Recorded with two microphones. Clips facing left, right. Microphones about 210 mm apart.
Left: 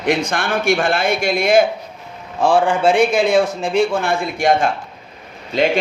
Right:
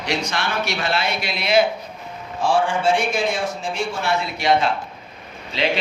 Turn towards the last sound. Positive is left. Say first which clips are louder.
# left 6 dB
turn(degrees=45)  # may be behind; listen again after turning